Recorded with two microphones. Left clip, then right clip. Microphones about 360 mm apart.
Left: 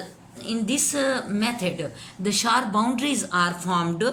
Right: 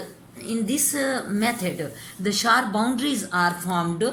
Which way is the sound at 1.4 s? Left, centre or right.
Left.